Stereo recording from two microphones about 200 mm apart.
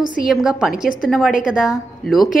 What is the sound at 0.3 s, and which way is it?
A woman's voice, centre (ahead or behind).